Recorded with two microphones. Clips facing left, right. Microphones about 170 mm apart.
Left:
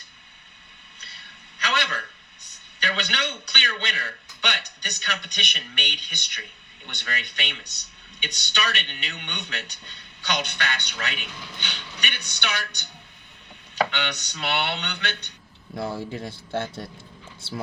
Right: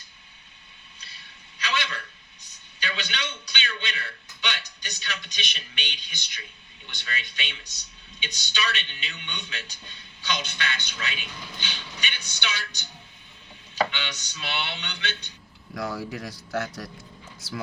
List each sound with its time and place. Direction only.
0.9 s a sound: 60° left (ahead or behind)
4.4 s a man's voice: 60° left (ahead or behind)
13.9 s a man's voice: 65° left (ahead or behind)
15.7 s speech: 25° left (ahead or behind)